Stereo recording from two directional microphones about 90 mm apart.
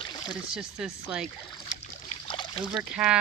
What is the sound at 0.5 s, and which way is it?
Speech, 5° right (ahead or behind).